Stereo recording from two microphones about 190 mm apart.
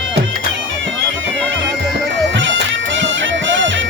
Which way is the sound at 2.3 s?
75° right (ahead or behind).